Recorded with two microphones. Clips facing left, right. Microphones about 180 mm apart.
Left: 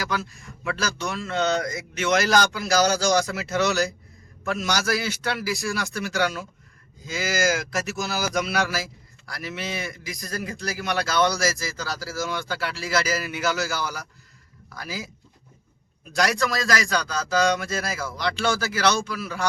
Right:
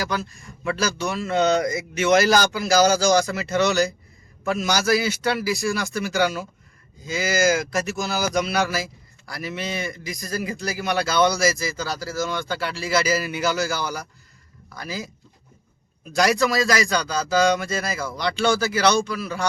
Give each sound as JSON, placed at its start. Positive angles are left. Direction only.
{"t": 0.0, "sound": "speech", "side_deg": 5}
{"t": 16.1, "sound": "speech", "side_deg": -5}